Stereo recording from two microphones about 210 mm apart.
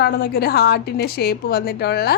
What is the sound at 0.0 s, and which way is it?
A woman's voice, 50° left (ahead or behind).